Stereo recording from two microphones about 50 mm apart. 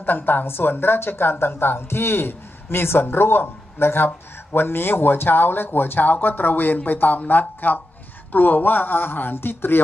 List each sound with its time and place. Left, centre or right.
0.0 s a woman's voice: left